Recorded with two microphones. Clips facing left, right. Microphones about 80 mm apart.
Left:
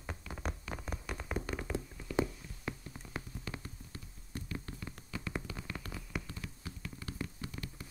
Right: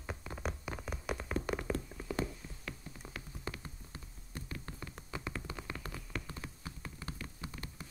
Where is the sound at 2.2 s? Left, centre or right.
Left.